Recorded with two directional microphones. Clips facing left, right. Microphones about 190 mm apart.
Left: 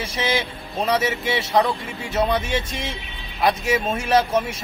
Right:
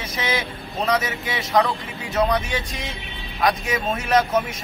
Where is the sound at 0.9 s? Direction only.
30° left (ahead or behind).